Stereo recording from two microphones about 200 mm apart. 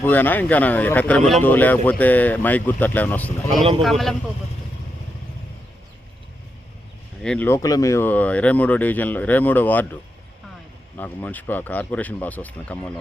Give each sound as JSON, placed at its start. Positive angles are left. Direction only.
{"t": 0.0, "sound": "speech", "side_deg": 10}
{"t": 7.2, "sound": "speech", "side_deg": 5}